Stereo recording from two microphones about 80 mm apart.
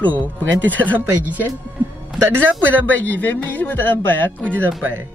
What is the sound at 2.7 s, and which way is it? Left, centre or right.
Speech, centre.